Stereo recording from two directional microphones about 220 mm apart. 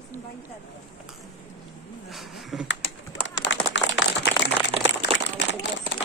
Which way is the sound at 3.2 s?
55° left (ahead or behind).